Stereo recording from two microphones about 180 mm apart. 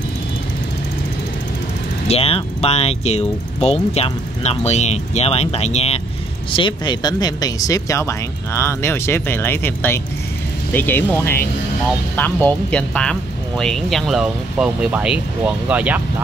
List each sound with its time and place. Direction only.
2.0 s speech: 35° left (ahead or behind); by 16.0 s 10° right (ahead or behind)